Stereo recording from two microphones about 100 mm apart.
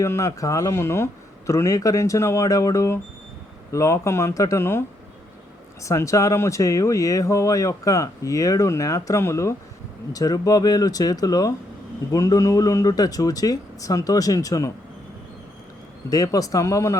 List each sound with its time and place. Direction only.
0.0 s speech: 30° left (ahead or behind)
5.8 s speech: 30° left (ahead or behind)
16.0 s speech: 35° left (ahead or behind)